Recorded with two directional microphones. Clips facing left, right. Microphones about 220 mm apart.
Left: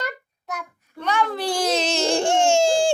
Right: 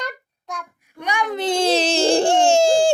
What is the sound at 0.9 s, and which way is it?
Baby cry, 15° right (ahead or behind).